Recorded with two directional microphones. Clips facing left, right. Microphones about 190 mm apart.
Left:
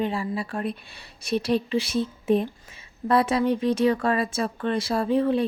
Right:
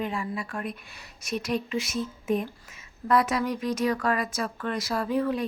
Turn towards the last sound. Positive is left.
turn(degrees=30)  # may be behind; listen again after turning